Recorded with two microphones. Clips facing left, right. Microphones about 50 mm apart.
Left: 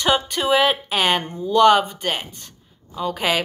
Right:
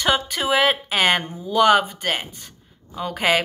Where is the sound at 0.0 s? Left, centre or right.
Centre.